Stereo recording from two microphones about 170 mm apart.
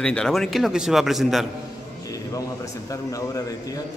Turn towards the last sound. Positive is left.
turn(degrees=20)  # may be behind; listen again after turning